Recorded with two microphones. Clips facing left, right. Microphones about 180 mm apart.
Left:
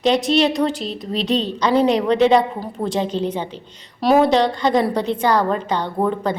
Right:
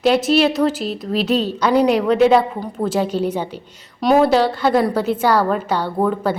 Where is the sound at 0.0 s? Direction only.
5° right (ahead or behind).